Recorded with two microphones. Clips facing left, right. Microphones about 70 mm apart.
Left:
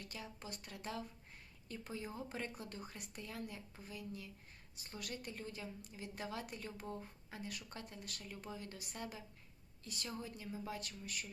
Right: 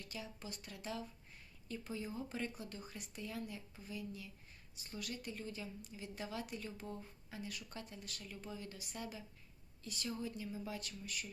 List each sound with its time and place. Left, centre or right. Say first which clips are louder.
0.1 s a woman's voice: right 1 dB; left